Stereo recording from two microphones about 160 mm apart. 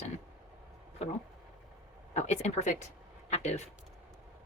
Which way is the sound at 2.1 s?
45° left (ahead or behind).